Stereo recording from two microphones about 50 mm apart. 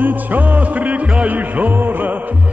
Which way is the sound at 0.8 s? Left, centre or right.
Right.